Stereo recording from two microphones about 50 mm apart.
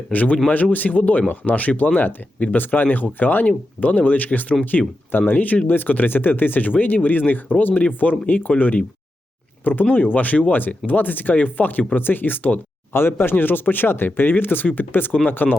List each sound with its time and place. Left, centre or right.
0.1 s speech: left
5.2 s speech: left
7.7 s speech: left
9.9 s speech: left
12.9 s speech: left